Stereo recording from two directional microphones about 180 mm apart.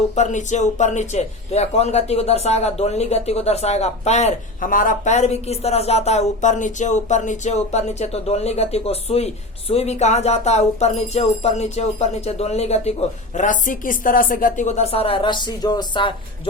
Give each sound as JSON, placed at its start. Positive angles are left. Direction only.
{"t": 0.2, "sound": "a man's voice", "side_deg": 40}